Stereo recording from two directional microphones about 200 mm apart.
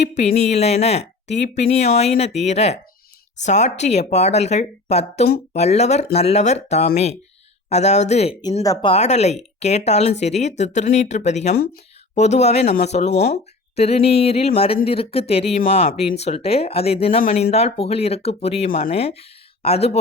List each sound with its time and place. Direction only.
0.0 s speech: 35° left (ahead or behind)
8.6 s speech: 15° left (ahead or behind)
8.9 s speech: 35° left (ahead or behind)